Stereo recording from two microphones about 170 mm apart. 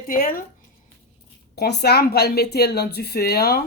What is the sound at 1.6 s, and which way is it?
Speech, 75° left (ahead or behind).